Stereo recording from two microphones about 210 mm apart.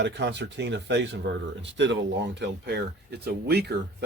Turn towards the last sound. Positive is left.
turn(degrees=-50)  # may be behind; listen again after turning